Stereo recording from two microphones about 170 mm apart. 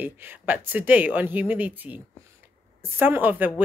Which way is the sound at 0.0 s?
10° right (ahead or behind).